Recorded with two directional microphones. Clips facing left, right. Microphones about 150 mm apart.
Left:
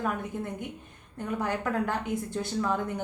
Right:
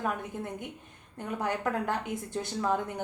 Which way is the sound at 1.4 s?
20° right (ahead or behind).